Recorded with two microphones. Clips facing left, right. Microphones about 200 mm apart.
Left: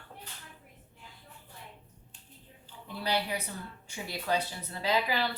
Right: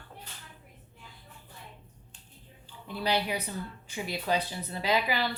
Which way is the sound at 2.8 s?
15° right (ahead or behind).